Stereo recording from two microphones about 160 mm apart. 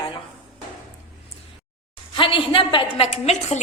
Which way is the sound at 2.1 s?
30° left (ahead or behind).